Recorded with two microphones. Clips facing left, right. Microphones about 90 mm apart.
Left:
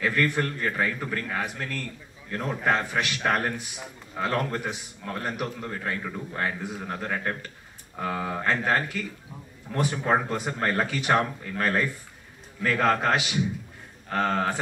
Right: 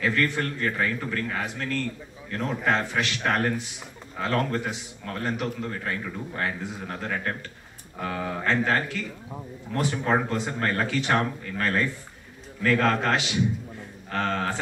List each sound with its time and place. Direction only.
0.0 s a man's voice: 15° left (ahead or behind)